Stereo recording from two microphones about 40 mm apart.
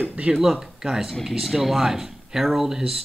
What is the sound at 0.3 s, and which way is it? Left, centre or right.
Speech, centre.